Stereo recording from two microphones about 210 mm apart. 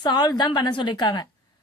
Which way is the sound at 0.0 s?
20° left (ahead or behind).